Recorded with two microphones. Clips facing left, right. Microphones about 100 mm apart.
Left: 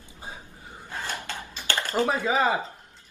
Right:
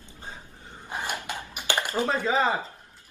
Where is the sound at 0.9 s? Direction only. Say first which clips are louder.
Right 2 dB; 15° right (ahead or behind).